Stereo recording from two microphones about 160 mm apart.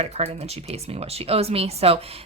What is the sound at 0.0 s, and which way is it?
Speech, 40° right (ahead or behind).